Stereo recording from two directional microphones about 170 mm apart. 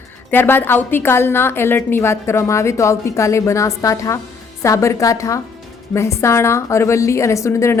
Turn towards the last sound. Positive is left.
turn(degrees=15)  # may be behind; listen again after turning